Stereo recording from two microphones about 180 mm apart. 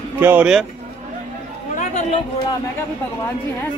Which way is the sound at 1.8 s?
40° left (ahead or behind).